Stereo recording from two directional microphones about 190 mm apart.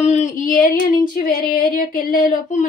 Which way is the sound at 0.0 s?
40° left (ahead or behind).